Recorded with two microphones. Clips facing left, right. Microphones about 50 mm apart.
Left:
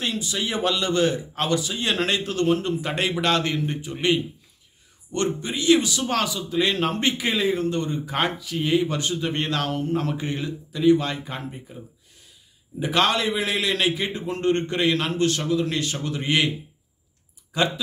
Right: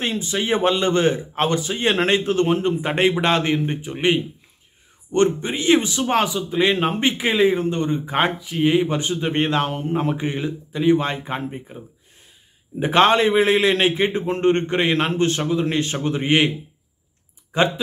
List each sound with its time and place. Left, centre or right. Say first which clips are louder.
0.0 s a man's voice: right 3 dB; right